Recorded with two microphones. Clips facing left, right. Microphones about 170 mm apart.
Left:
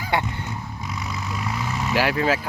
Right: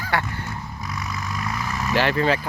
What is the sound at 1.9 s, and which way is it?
Speech, 5° left (ahead or behind).